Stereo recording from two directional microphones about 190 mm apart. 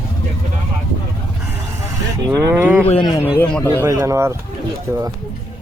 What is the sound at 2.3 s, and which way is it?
Speech, 15° right (ahead or behind).